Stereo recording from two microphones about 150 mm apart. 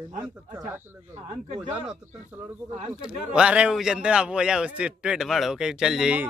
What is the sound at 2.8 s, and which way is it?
Speech, 35° right (ahead or behind).